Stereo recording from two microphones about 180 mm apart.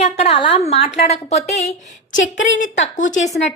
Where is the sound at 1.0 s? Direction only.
35° left (ahead or behind).